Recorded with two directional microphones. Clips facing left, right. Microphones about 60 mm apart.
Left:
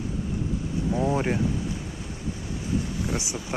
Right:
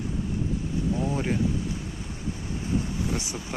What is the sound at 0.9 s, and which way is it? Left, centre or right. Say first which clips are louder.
Speech: left 4 dB; left.